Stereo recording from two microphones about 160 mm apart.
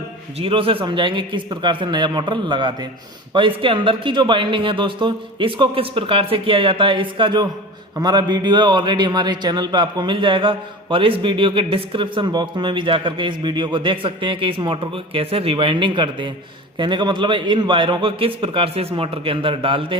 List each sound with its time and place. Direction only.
0.3 s a man's voice: 35° right (ahead or behind)